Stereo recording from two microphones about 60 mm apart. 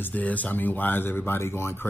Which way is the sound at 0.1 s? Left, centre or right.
Left.